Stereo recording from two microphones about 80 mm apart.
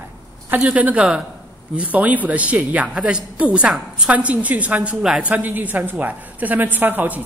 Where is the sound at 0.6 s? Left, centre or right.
Centre.